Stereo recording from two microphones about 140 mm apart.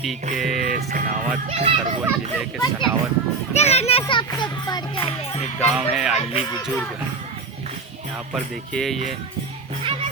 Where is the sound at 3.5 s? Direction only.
50° left (ahead or behind).